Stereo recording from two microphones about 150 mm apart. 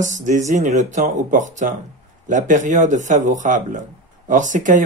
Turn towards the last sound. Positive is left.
turn(degrees=-60)  # may be behind; listen again after turning